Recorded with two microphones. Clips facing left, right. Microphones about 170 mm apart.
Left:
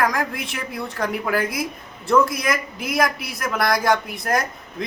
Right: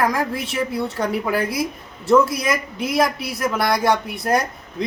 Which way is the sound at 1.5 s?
Centre (ahead or behind).